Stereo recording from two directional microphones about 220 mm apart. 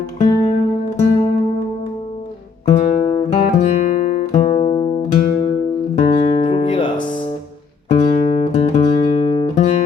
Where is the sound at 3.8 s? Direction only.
35° left (ahead or behind).